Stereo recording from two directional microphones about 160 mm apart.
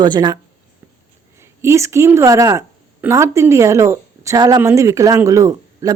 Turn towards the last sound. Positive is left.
turn(degrees=-20)  # may be behind; listen again after turning